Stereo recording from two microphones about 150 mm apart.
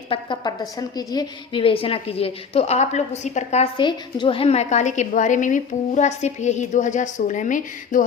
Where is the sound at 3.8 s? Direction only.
30° left (ahead or behind).